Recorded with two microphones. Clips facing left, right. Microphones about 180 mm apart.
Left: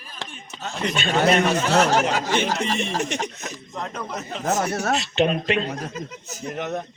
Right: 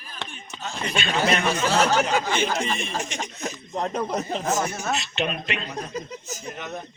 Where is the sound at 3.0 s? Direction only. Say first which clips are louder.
Left 5 dB; 65° left (ahead or behind).